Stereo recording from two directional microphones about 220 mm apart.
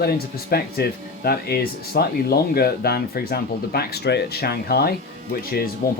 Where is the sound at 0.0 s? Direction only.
45° left (ahead or behind).